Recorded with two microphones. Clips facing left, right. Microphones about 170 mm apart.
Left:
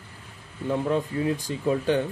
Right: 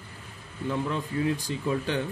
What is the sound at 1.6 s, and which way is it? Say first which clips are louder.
Mantra: left 6 dB; 40° left (ahead or behind).